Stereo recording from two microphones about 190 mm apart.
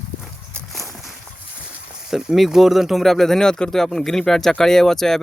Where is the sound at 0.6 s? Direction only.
Centre (ahead or behind).